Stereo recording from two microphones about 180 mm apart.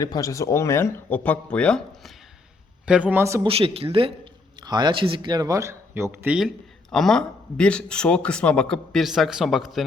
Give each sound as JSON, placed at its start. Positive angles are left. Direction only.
{"t": 0.0, "sound": "speech", "side_deg": 20}
{"t": 2.8, "sound": "speech", "side_deg": -5}
{"t": 3.4, "sound": "a man's voice", "side_deg": -30}